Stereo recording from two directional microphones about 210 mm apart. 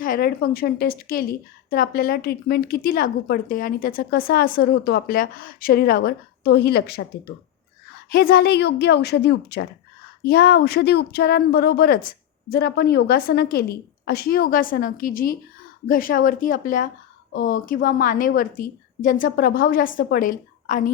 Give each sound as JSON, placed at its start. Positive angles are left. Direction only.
{"t": 0.0, "sound": "a woman's voice", "side_deg": 45}